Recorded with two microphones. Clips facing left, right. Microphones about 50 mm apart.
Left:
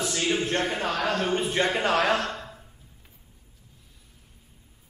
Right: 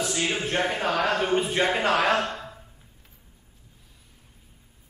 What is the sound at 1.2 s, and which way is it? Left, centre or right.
Speech, centre.